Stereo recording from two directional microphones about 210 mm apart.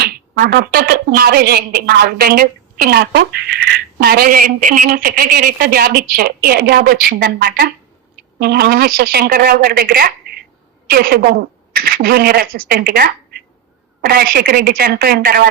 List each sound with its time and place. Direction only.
0.0 s speech: 45° right (ahead or behind)